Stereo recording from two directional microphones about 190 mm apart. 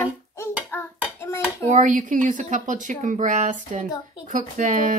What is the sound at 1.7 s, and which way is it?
Speech, 40° right (ahead or behind).